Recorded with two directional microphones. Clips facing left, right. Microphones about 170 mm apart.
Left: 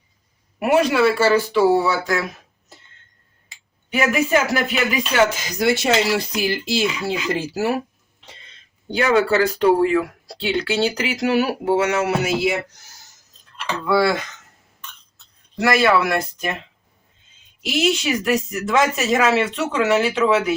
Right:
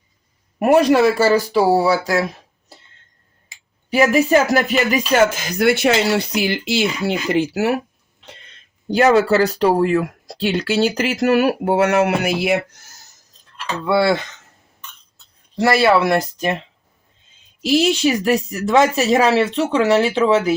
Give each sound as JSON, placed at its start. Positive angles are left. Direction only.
{"t": 0.6, "sound": "speech", "side_deg": -40}
{"t": 3.8, "sound": "speech", "side_deg": -35}
{"t": 9.0, "sound": "speech", "side_deg": -40}
{"t": 13.8, "sound": "speech", "side_deg": -25}
{"t": 15.5, "sound": "speech", "side_deg": -30}
{"t": 17.6, "sound": "speech", "side_deg": -35}